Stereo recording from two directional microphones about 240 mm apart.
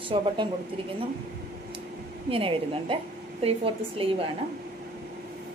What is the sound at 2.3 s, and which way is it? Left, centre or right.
A woman's voice, right.